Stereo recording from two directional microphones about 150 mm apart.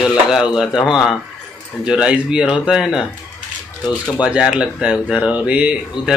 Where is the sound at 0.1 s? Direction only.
5° right (ahead or behind).